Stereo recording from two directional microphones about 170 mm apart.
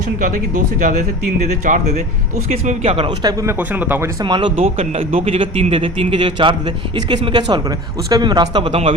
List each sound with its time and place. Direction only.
0.2 s speech: 50° right (ahead or behind); by 4.1 s 10° right (ahead or behind)
4.2 s speech: 25° right (ahead or behind)